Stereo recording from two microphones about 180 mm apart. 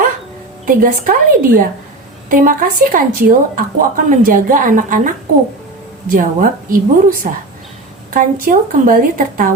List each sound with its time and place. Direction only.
0.6 s a woman's voice: 50° right (ahead or behind)
6.1 s a woman's voice: 50° right (ahead or behind)